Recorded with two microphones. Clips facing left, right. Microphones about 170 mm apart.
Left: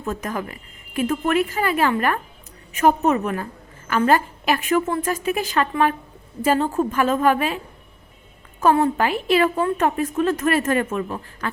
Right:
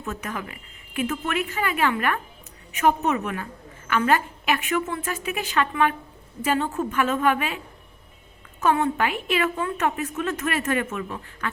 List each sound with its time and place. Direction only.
0.0 s a woman's voice: 35° left (ahead or behind)
8.6 s a woman's voice: 35° left (ahead or behind)